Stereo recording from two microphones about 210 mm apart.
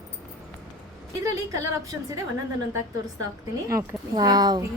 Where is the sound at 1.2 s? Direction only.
15° right (ahead or behind).